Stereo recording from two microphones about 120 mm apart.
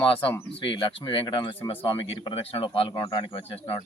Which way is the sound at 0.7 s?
45° left (ahead or behind).